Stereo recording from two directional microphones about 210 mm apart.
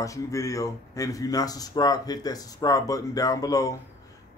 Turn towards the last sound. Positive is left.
turn(degrees=15)  # may be behind; listen again after turning